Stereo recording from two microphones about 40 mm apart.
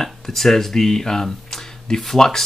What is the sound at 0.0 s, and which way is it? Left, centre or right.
Speech, centre.